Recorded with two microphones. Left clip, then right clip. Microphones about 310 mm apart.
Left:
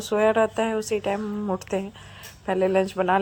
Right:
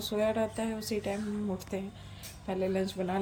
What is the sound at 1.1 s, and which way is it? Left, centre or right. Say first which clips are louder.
Speech: left 9 dB; left.